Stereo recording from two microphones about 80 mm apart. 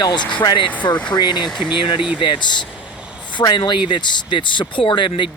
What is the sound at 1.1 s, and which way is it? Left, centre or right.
Speech, left.